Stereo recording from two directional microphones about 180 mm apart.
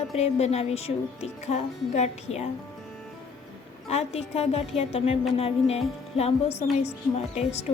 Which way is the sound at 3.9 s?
35° left (ahead or behind).